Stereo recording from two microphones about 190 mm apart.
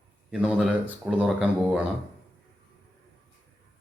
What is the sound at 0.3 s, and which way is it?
Speech, 5° right (ahead or behind).